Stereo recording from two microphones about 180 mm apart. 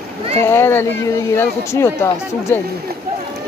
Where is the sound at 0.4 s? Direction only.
15° left (ahead or behind).